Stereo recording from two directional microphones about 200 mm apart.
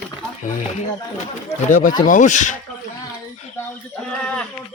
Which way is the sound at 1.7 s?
40° left (ahead or behind).